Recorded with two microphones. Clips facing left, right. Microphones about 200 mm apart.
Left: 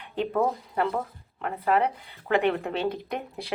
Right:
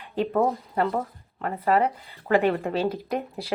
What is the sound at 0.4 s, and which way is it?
Speech, centre (ahead or behind).